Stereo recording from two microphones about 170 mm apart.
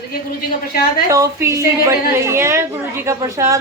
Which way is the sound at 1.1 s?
20° right (ahead or behind).